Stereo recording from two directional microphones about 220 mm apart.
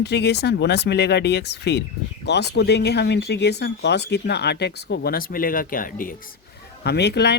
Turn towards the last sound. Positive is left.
turn(degrees=50)  # may be behind; listen again after turning